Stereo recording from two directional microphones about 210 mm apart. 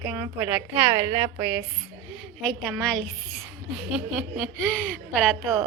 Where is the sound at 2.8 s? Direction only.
5° left (ahead or behind).